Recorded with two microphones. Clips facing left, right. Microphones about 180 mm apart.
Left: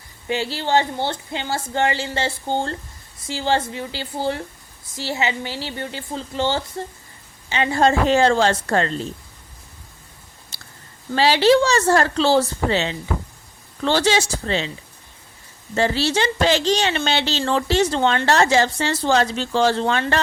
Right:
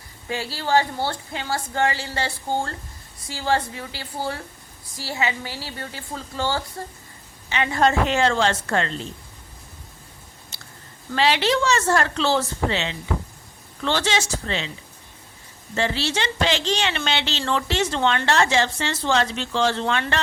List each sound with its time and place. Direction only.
0.3 s speech: 25° left (ahead or behind); by 9.0 s 40° left (ahead or behind)
10.5 s chewing: 35° left (ahead or behind)
11.1 s speech: 35° left (ahead or behind)
15.7 s speech: 40° left (ahead or behind)